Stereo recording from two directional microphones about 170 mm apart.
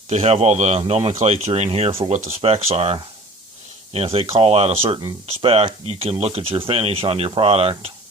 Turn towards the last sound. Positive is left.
turn(degrees=-35)  # may be behind; listen again after turning